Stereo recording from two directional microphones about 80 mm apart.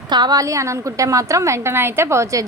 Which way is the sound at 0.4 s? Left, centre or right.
Right.